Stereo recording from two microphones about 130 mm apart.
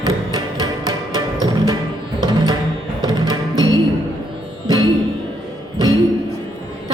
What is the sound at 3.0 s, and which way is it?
Music, 30° right (ahead or behind).